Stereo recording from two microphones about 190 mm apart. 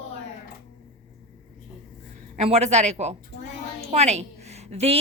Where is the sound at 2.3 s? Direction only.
35° right (ahead or behind).